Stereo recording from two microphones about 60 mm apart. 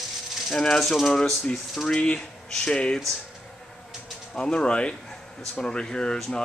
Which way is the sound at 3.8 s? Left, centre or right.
Centre.